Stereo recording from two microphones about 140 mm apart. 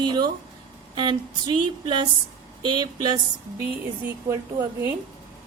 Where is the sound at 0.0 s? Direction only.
30° right (ahead or behind).